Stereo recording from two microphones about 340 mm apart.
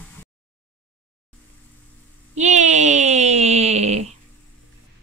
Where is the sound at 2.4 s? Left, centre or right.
Right.